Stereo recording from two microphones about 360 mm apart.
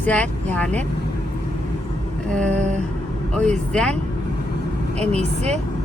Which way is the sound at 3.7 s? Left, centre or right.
Centre.